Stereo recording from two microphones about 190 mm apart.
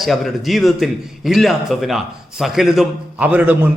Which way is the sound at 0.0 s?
Centre (ahead or behind).